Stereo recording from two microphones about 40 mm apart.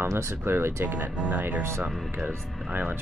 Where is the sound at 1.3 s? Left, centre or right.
Right.